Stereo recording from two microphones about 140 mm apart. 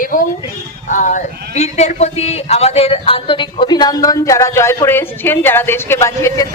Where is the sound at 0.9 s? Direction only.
65° left (ahead or behind).